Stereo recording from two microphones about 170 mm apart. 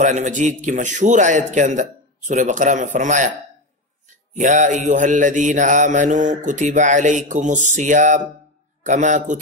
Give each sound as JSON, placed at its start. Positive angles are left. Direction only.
{"t": 0.0, "sound": "mantra", "side_deg": -45}
{"t": 4.3, "sound": "mantra", "side_deg": -50}